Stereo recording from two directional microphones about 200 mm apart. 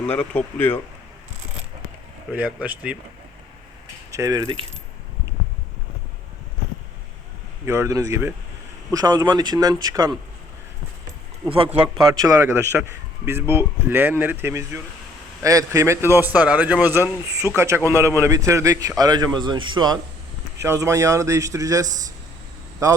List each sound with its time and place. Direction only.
0.0 s speech: 5° left (ahead or behind)
2.3 s a man's voice: 5° right (ahead or behind)
4.1 s speech: 15° right (ahead or behind)
7.6 s a man's voice: 15° right (ahead or behind)
11.4 s a man's voice: 25° right (ahead or behind)